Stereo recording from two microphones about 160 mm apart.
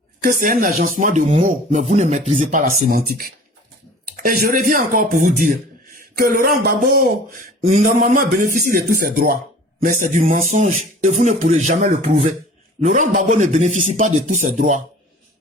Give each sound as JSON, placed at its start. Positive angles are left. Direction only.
{"t": 0.2, "sound": "speech", "side_deg": -60}
{"t": 4.0, "sound": "a sound", "side_deg": -65}
{"t": 9.8, "sound": "speech", "side_deg": -55}